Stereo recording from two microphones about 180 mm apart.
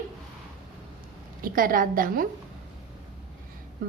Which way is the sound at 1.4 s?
50° right (ahead or behind).